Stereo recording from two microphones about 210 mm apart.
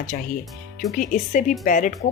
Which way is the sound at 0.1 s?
45° left (ahead or behind).